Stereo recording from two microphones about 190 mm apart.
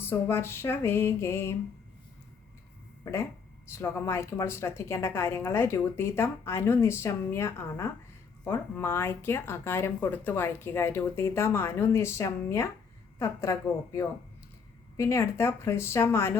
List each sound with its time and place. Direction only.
0.0 s a woman's voice: 10° left (ahead or behind)
3.0 s a woman's voice: 15° left (ahead or behind)